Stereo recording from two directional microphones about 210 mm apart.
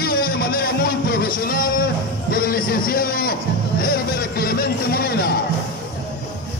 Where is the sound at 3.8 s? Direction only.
45° left (ahead or behind).